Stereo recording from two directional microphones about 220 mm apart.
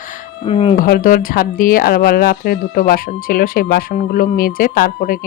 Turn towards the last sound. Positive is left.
turn(degrees=40)  # may be behind; listen again after turning